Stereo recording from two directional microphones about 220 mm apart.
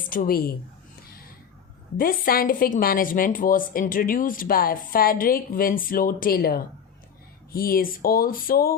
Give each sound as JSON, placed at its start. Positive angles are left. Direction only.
{"t": 0.1, "sound": "a woman's voice", "side_deg": 40}
{"t": 2.0, "sound": "a woman's voice", "side_deg": 40}